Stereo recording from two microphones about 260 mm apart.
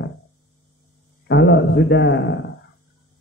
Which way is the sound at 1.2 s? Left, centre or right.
Left.